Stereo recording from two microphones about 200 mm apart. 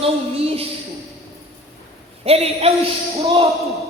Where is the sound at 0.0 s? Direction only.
30° right (ahead or behind).